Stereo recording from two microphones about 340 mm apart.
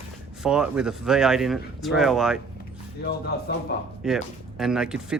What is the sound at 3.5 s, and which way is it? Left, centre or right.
Speech, left.